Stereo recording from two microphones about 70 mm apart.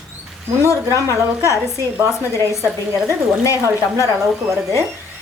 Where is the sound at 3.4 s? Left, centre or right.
Left.